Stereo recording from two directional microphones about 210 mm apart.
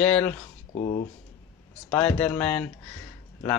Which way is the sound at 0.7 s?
30° left (ahead or behind).